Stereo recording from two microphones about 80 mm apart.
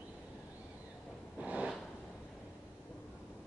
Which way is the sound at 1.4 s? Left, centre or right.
Centre.